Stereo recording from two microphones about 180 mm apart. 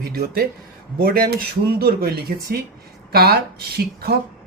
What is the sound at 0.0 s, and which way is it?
Speech, 60° right (ahead or behind).